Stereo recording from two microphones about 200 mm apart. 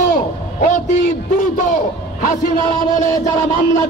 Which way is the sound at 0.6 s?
40° left (ahead or behind).